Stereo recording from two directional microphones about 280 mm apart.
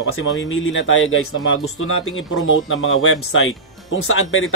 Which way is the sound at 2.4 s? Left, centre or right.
Left.